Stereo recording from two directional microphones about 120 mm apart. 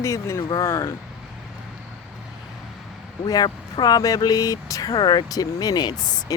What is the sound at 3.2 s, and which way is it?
Speech, 35° left (ahead or behind).